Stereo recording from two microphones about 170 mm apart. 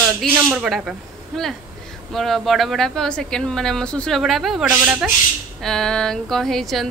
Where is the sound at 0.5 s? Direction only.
5° right (ahead or behind).